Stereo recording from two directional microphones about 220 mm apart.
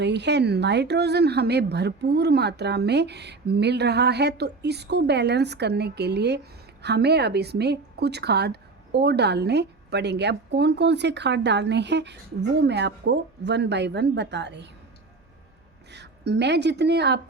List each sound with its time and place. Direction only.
0.0 s a woman's voice: 50° right (ahead or behind)
15.9 s speech: 50° right (ahead or behind)